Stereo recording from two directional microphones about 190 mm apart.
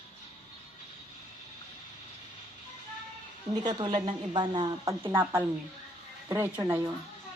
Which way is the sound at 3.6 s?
20° right (ahead or behind).